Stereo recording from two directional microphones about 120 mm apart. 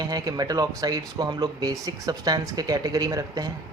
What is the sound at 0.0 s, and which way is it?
Speech, 30° right (ahead or behind).